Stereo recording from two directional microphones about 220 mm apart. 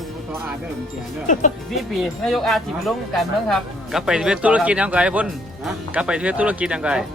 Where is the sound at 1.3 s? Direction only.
35° left (ahead or behind).